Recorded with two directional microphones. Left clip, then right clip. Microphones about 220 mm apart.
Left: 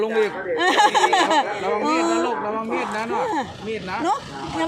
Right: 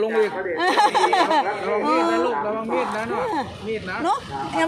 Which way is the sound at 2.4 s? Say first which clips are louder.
Right 1 dB; 45° left (ahead or behind).